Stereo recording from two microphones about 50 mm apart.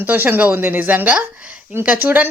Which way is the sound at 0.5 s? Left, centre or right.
Right.